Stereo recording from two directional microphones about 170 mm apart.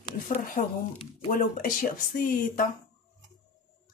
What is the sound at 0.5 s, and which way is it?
Speech, 50° left (ahead or behind).